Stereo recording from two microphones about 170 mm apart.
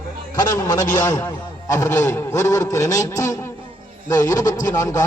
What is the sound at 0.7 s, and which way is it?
A man's voice, 15° left (ahead or behind).